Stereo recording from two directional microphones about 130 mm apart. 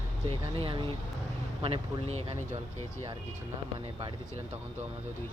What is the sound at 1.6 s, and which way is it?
Speech, 50° right (ahead or behind).